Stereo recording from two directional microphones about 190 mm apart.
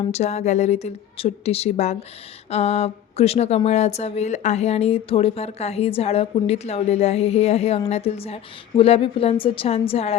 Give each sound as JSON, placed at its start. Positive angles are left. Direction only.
{"t": 0.0, "sound": "speech", "side_deg": 35}